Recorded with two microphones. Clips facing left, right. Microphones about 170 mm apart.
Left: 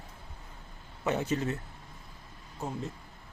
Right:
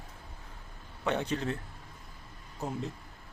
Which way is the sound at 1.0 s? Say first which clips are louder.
Left 1 dB; 5° left (ahead or behind).